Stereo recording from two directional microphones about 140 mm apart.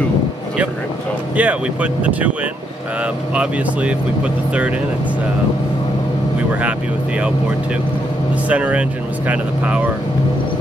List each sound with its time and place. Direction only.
1.3 s speech: 10° right (ahead or behind)
3.3 s speech: 10° right (ahead or behind)
8.5 s speech: 10° right (ahead or behind)